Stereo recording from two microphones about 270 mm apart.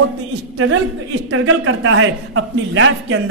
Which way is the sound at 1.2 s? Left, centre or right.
Right.